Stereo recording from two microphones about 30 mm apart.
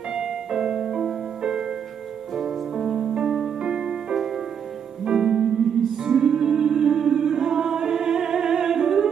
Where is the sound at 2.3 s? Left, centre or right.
Centre.